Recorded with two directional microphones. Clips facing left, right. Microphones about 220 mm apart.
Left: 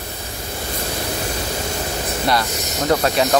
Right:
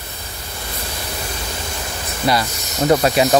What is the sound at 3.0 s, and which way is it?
Speech, 15° right (ahead or behind).